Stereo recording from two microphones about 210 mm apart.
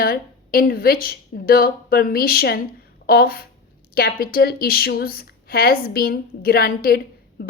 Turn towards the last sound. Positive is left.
turn(degrees=45)  # may be behind; listen again after turning